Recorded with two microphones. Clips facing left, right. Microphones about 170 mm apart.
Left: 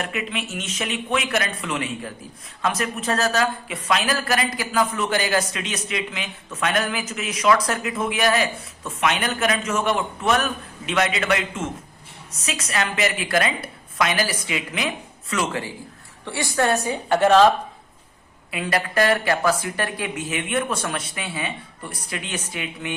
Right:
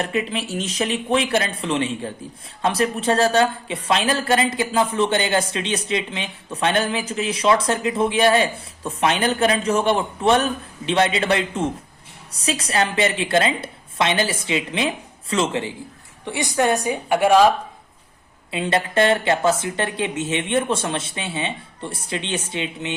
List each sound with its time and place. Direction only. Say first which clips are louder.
0.0 s a woman's voice: right 4 dB; 30° right (ahead or behind); by 17.5 s 10° right (ahead or behind)
18.5 s speech: right 3 dB; 25° right (ahead or behind)